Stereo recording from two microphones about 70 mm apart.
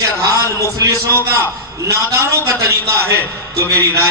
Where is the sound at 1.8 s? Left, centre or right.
Right.